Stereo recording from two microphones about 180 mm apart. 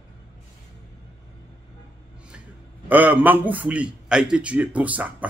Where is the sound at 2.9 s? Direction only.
10° right (ahead or behind).